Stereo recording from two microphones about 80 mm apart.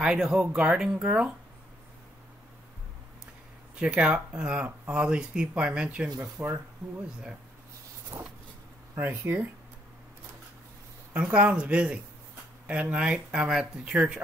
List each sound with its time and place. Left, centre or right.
0.0 s speech: centre
3.7 s speech: centre
6.4 s speech: right
8.1 s a sound: right
8.9 s speech: right
11.1 s speech: centre